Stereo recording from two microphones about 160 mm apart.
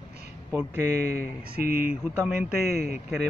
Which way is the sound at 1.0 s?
75° right (ahead or behind).